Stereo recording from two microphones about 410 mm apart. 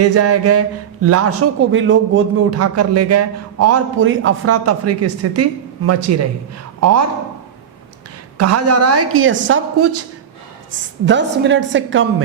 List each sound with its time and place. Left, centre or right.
0.0 s a woman's voice: right
8.4 s speech: right
11.0 s a woman's voice: right